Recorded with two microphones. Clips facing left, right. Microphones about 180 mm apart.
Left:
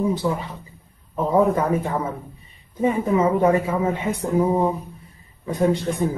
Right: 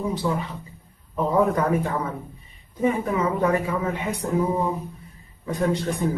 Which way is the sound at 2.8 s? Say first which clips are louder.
Left 3 dB; 25° left (ahead or behind).